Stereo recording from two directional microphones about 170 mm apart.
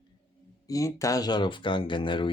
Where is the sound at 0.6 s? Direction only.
20° left (ahead or behind).